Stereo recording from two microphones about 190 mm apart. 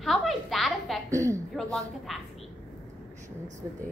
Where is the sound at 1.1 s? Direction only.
15° right (ahead or behind).